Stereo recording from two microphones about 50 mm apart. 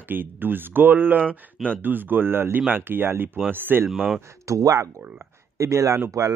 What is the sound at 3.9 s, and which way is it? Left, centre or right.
Speech, centre.